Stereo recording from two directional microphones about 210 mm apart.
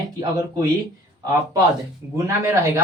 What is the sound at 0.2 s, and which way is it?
Speech, 15° right (ahead or behind).